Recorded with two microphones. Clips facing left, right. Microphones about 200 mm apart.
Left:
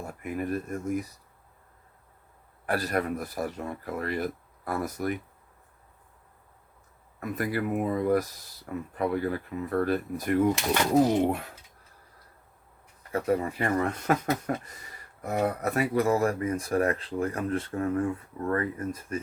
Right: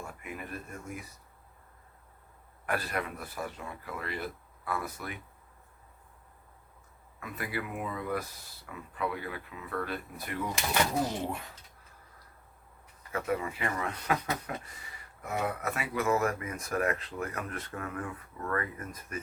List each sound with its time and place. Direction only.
0.0 s speech: 40° left (ahead or behind)
2.6 s speech: 40° left (ahead or behind)
7.2 s speech: 45° left (ahead or behind)
13.1 s speech: 35° left (ahead or behind)